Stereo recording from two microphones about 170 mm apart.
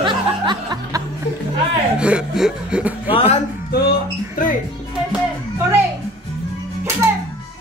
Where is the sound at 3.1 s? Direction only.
35° left (ahead or behind).